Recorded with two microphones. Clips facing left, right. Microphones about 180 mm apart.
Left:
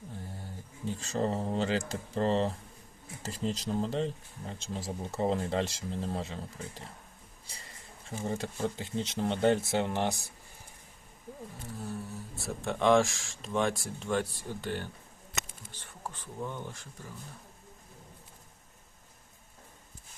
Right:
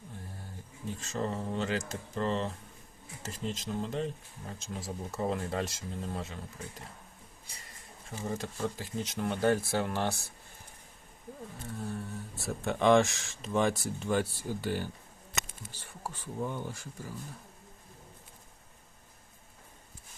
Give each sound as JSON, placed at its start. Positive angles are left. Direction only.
{"t": 0.9, "sound": "speech", "side_deg": 35}
{"t": 8.2, "sound": "speech", "side_deg": 30}
{"t": 11.8, "sound": "speech", "side_deg": 0}